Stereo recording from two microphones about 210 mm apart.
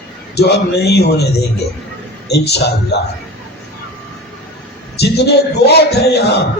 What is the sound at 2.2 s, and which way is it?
Speech, 50° left (ahead or behind).